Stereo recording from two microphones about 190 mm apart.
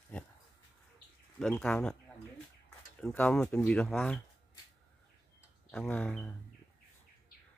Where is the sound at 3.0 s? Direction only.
5° left (ahead or behind).